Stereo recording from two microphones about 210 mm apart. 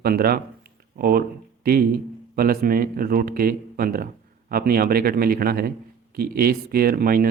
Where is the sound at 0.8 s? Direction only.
45° right (ahead or behind).